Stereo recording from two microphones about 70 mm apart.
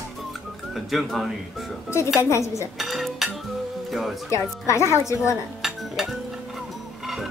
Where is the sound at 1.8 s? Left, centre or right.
Left.